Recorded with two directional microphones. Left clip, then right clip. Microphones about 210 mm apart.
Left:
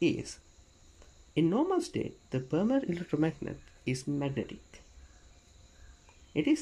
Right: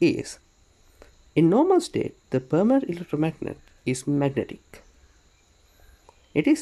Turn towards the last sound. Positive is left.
turn(degrees=-20)  # may be behind; listen again after turning